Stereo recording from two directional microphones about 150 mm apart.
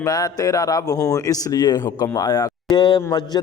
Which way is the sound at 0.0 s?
25° left (ahead or behind).